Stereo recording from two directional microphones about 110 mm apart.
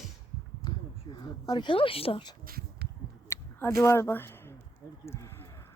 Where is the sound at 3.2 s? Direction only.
25° left (ahead or behind).